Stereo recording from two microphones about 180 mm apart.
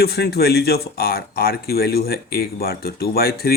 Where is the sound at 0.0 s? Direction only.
60° left (ahead or behind).